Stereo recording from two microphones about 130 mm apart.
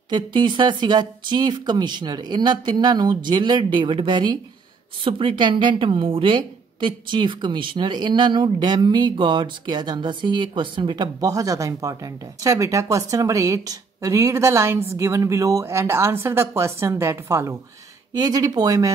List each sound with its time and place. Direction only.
0.1 s a woman's voice: 35° right (ahead or behind)